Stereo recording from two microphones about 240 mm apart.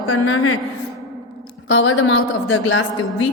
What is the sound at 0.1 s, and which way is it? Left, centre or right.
Mantra, left.